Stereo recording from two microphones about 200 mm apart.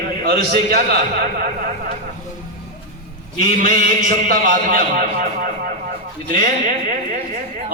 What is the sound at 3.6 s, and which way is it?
A man's voice, 40° right (ahead or behind).